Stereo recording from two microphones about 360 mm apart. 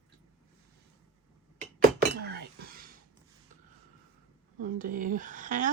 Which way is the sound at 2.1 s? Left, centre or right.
Right.